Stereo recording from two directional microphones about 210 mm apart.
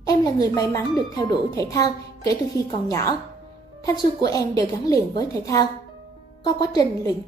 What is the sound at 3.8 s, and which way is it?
Speech, 15° left (ahead or behind).